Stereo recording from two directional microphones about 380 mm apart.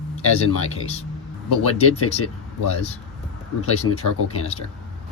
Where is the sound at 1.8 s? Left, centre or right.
Left.